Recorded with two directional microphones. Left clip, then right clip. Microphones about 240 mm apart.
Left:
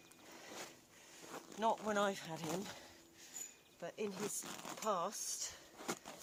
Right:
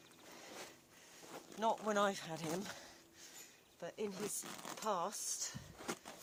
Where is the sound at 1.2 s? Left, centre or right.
Left.